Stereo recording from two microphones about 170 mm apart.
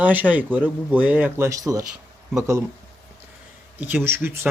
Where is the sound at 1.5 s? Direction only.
20° right (ahead or behind).